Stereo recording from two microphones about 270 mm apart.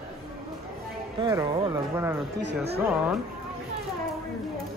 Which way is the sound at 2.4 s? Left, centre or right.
Right.